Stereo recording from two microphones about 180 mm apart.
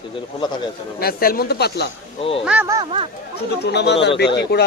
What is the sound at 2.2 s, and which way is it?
Speech, 30° left (ahead or behind).